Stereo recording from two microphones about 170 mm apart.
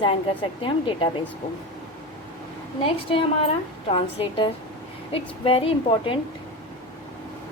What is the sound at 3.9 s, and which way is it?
A woman's voice, 30° left (ahead or behind).